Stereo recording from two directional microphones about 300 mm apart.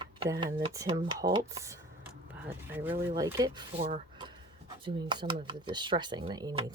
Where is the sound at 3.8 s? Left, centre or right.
Right.